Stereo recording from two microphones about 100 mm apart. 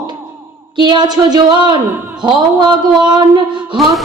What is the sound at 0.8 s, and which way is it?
Speech, 50° right (ahead or behind).